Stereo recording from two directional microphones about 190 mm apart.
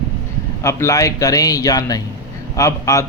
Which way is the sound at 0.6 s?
15° left (ahead or behind).